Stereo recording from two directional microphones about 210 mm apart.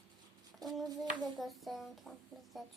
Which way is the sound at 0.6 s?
Centre (ahead or behind).